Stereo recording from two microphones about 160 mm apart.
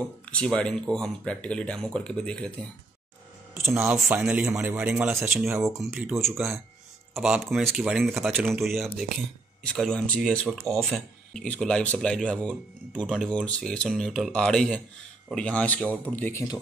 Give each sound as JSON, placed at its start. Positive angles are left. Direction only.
{"t": 0.2, "sound": "speech", "side_deg": 5}
{"t": 3.5, "sound": "a man's voice", "side_deg": -15}